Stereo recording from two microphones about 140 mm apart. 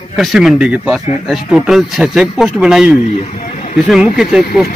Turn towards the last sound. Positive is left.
turn(degrees=-5)  # may be behind; listen again after turning